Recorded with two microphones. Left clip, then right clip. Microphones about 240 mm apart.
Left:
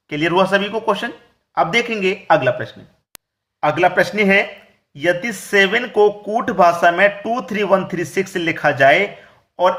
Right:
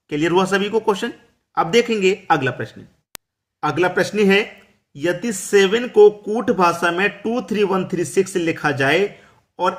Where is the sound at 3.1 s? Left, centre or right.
Centre.